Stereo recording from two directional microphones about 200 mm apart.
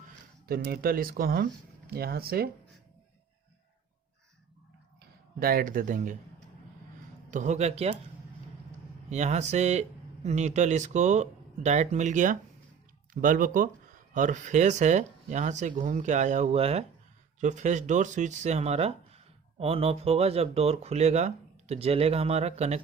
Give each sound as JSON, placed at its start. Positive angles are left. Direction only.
{"t": 0.4, "sound": "speech", "side_deg": -50}
{"t": 5.4, "sound": "speech", "side_deg": -50}
{"t": 7.3, "sound": "speech", "side_deg": -35}
{"t": 9.0, "sound": "speech", "side_deg": -35}